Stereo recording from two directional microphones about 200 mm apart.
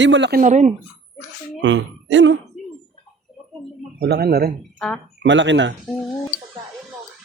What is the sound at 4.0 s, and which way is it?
Speech, 55° right (ahead or behind).